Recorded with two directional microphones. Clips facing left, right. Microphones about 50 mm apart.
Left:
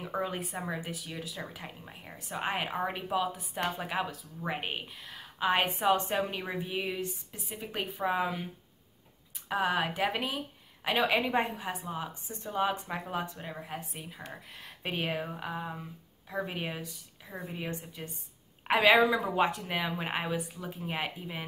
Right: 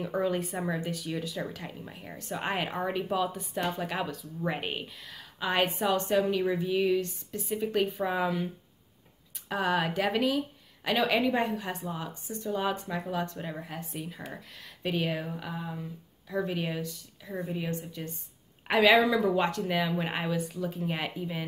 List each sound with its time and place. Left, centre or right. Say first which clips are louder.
0.2 s a woman's voice: right 7 dB; centre
5.8 s a woman's voice: right 1 dB; left
9.5 s a woman's voice: right 1 dB; centre
11.2 s speech: right 2 dB; left
11.6 s a woman's voice: right 1 dB; centre
12.3 s speech: right 7 dB; left
12.5 s a woman's voice: left 2 dB; centre
12.9 s speech: right 2 dB; left
13.2 s a woman's voice: right 4 dB; centre
14.6 s speech: right 4 dB; left
17.3 s a woman's voice: right 6 dB; centre
17.6 s a woman's voice: right 4 dB; centre